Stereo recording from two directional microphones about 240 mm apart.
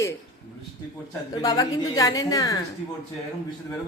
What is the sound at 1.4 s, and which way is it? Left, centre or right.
Speech, centre.